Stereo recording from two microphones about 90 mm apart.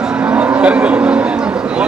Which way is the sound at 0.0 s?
15° right (ahead or behind).